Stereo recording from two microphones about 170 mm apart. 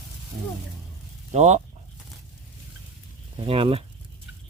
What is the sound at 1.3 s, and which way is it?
Speech, 40° right (ahead or behind).